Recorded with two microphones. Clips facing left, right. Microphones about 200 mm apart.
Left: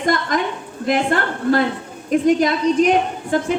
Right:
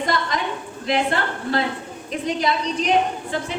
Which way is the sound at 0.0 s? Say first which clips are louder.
Left 4 dB; 50° left (ahead or behind).